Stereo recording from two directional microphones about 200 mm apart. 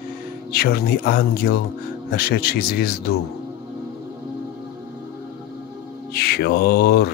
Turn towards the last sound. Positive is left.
turn(degrees=55)  # may be behind; listen again after turning